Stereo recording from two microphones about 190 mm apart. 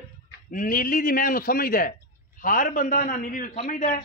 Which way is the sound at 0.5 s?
45° left (ahead or behind).